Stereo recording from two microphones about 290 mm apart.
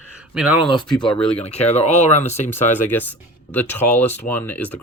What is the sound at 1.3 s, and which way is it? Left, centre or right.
Speech, left.